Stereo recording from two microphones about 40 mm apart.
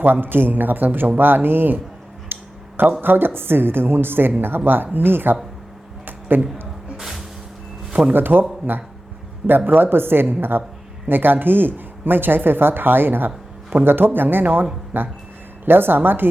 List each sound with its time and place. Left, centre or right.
0.0 s speech: right
2.3 s a sound: right
3.0 s speech: right
6.1 s a sound: right
6.9 s music: centre
8.1 s speech: right